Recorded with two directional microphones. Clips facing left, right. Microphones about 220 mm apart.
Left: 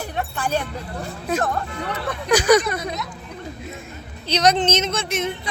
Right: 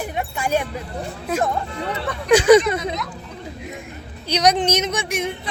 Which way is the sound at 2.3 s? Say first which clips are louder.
Right 4 dB; 25° right (ahead or behind).